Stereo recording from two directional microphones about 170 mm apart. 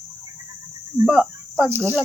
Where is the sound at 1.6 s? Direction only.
10° right (ahead or behind).